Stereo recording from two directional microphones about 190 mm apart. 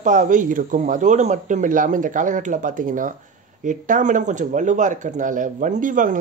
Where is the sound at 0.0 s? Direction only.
40° right (ahead or behind).